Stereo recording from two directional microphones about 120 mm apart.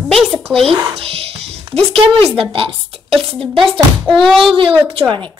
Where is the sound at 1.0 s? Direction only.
50° right (ahead or behind).